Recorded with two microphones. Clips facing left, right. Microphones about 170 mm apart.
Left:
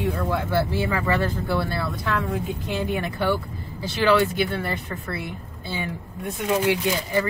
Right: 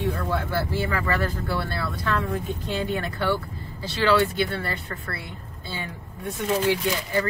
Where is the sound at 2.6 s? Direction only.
15° left (ahead or behind).